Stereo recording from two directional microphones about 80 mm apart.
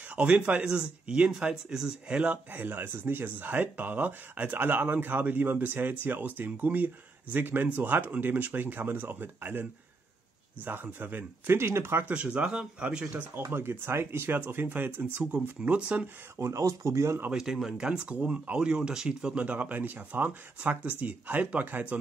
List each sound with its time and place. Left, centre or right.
0.1 s speech: centre
12.1 s speech: centre
13.3 s speech: right
16.3 s speech: right
17.3 s speech: centre